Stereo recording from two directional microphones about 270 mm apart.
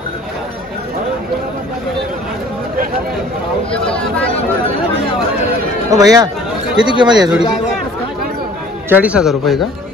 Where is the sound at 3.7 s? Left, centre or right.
Centre.